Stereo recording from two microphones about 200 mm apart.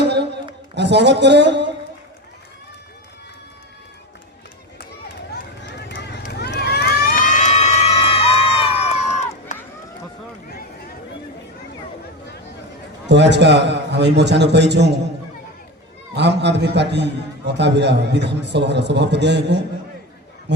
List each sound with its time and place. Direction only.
0.0 s a sound: 55° right (ahead or behind)
0.8 s a man's voice: 60° right (ahead or behind)
6.2 s crowd: 55° left (ahead or behind); by 9.0 s 30° left (ahead or behind)
9.5 s run: 35° left (ahead or behind)
13.1 s a man's voice: 60° right (ahead or behind)
16.1 s a man's voice: 60° right (ahead or behind)